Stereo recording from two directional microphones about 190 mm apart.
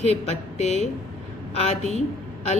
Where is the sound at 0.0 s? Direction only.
35° left (ahead or behind).